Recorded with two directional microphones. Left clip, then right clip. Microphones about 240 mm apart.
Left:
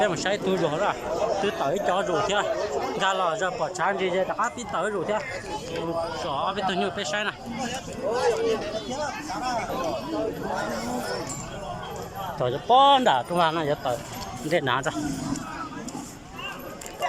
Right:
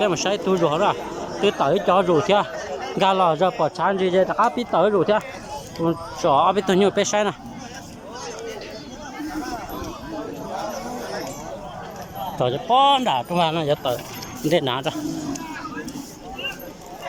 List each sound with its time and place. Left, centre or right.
0.0 s speech: centre
6.2 s speech: right
12.4 s speech: centre